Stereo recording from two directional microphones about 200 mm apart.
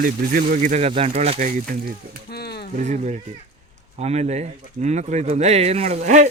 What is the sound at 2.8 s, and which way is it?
Speech, 35° right (ahead or behind).